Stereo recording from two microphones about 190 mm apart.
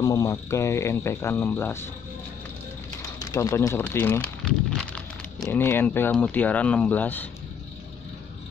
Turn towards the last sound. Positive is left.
turn(degrees=10)  # may be behind; listen again after turning